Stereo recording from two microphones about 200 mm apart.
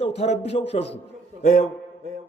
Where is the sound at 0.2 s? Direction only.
30° left (ahead or behind).